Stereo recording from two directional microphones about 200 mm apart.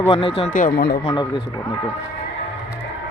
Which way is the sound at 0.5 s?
50° left (ahead or behind).